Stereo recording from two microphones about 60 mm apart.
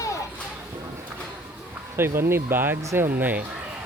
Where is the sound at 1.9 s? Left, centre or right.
Right.